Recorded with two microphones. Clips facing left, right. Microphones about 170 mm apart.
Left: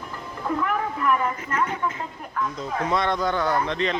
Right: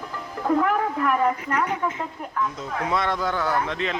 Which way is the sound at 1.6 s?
20° right (ahead or behind).